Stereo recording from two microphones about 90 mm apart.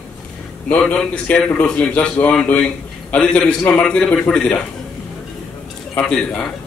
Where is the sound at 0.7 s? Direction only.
10° left (ahead or behind).